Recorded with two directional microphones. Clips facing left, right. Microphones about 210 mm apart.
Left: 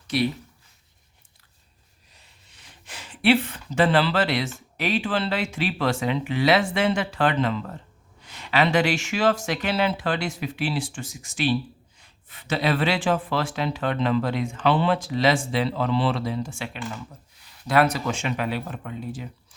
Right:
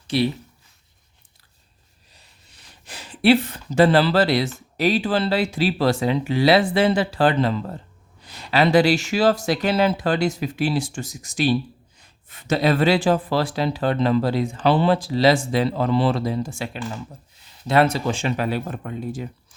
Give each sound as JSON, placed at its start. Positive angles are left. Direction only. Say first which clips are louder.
{"t": 2.1, "sound": "speech", "louder": "right 2 dB", "side_deg": -35}
{"t": 17.7, "sound": "speech", "louder": "right 3 dB", "side_deg": -25}